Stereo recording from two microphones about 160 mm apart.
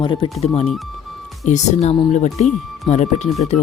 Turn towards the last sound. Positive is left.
turn(degrees=0)  # may be behind; listen again after turning